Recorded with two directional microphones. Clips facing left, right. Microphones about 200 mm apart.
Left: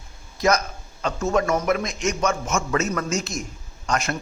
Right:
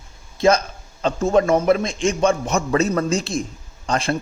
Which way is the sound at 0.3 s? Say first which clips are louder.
Right 4 dB; 30° right (ahead or behind).